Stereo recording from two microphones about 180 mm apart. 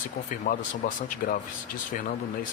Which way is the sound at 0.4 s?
50° left (ahead or behind).